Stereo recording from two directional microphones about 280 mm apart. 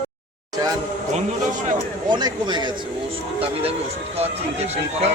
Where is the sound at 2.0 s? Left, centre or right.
Centre.